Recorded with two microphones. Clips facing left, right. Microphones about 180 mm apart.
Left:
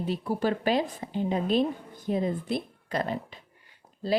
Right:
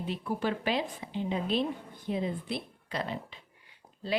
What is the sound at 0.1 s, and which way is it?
A woman's voice, 40° left (ahead or behind).